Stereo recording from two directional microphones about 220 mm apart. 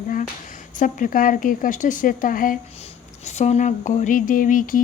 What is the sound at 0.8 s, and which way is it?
Speech, 35° left (ahead or behind).